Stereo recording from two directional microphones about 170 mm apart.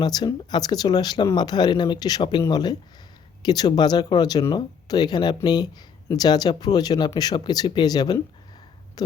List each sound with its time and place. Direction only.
0.0 s speech: 25° left (ahead or behind)